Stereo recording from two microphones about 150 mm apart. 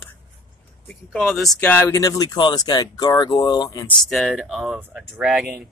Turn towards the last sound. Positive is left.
turn(degrees=-5)  # may be behind; listen again after turning